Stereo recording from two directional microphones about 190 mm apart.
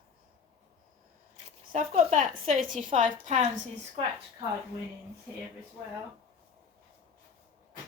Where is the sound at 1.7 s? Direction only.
45° right (ahead or behind).